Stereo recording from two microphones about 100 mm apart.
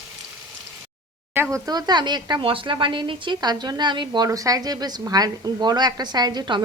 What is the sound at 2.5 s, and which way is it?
A woman's voice, 55° right (ahead or behind).